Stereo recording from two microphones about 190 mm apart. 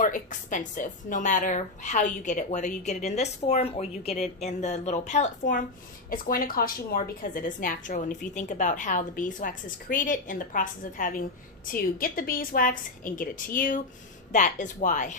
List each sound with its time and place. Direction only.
0.0 s a woman's voice: 40° left (ahead or behind)